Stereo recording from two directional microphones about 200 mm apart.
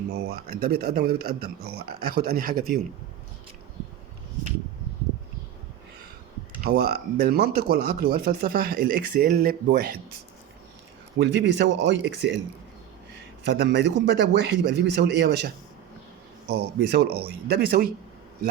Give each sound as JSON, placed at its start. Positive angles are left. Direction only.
{"t": 0.1, "sound": "speech", "side_deg": -55}
{"t": 6.6, "sound": "speech", "side_deg": -50}
{"t": 11.2, "sound": "a man's voice", "side_deg": -60}
{"t": 13.7, "sound": "a man's voice", "side_deg": -60}
{"t": 16.5, "sound": "a man's voice", "side_deg": -55}